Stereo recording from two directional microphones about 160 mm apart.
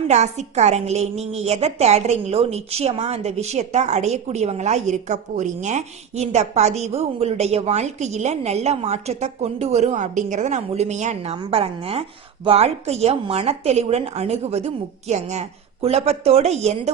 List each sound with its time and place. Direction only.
0.1 s a woman's voice: 45° right (ahead or behind)